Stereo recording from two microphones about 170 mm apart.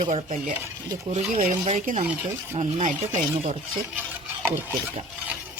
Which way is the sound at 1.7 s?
50° right (ahead or behind).